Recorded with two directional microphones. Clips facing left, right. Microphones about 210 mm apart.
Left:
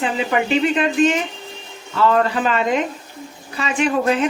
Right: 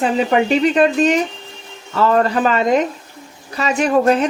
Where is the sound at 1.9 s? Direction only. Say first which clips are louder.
Right 2 dB; 40° right (ahead or behind).